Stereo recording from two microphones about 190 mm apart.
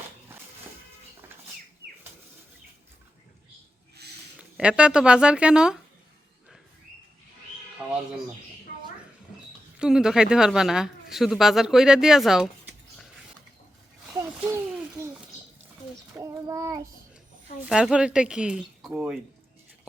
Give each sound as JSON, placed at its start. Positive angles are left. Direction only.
{"t": 4.4, "sound": "speech", "side_deg": -5}
{"t": 9.7, "sound": "a woman's voice", "side_deg": -5}
{"t": 14.1, "sound": "a sound", "side_deg": -15}
{"t": 16.1, "sound": "child singing", "side_deg": -15}
{"t": 17.7, "sound": "speech", "side_deg": -5}